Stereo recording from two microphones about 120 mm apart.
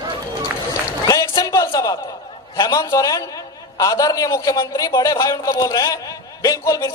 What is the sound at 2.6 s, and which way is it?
A man's voice, 30° left (ahead or behind).